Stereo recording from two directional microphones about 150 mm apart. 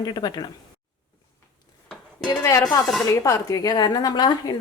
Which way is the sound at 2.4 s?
25° left (ahead or behind).